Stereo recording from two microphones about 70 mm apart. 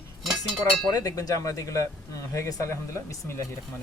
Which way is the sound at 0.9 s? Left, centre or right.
Left.